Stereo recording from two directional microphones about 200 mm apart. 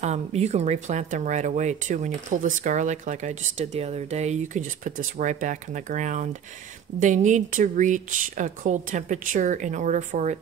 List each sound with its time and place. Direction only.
0.0 s speech: 35° right (ahead or behind)